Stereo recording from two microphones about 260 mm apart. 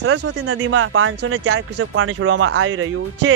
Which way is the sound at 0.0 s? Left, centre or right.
Right.